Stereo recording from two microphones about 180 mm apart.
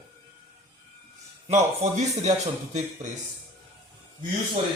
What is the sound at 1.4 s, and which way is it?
Speech, 40° right (ahead or behind).